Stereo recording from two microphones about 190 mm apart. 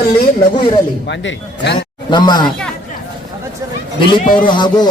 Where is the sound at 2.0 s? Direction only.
25° left (ahead or behind).